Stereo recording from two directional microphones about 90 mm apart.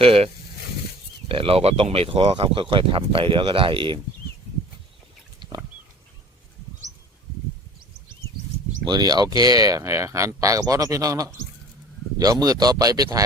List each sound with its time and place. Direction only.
0.0 s speech: 90° right
1.3 s speech: 90° right; by 4.0 s 70° right (ahead or behind)
8.8 s speech: 50° right (ahead or behind)